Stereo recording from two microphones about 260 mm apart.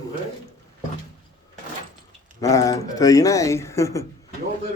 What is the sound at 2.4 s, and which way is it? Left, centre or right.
Speech, centre.